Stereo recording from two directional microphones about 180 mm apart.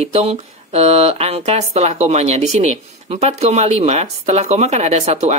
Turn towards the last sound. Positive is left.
turn(degrees=-40)  # may be behind; listen again after turning